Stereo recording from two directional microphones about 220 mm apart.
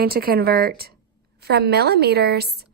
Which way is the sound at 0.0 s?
45° right (ahead or behind).